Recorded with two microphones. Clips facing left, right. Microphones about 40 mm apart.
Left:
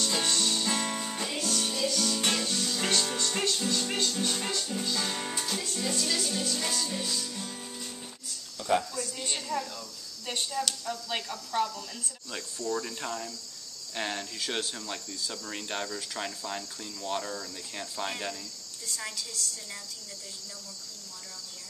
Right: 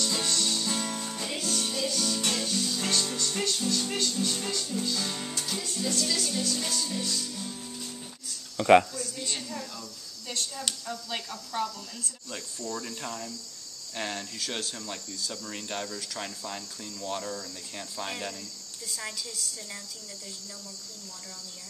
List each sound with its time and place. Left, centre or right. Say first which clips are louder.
0.2 s music: left 1 dB; left
1.3 s music: right 1 dB; centre
2.8 s music: left 1 dB; left
5.5 s music: left 1 dB; centre
5.8 s music: right 2 dB; centre
8.5 s a sound: right 9 dB; right
10.2 s speech: left 3 dB; left
10.9 s a woman's voice: left 2 dB; centre